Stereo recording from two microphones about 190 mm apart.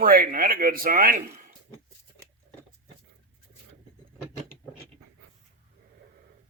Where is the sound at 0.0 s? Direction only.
50° right (ahead or behind).